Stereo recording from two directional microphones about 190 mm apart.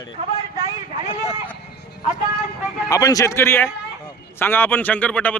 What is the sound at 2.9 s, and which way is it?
A man's voice, 20° left (ahead or behind).